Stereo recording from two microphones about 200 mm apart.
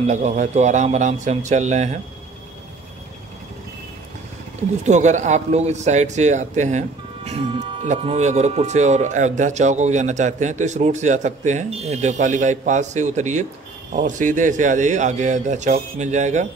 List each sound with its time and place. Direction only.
0.0 s a man's voice: 35° right (ahead or behind)
4.8 s a man's voice: 35° right (ahead or behind)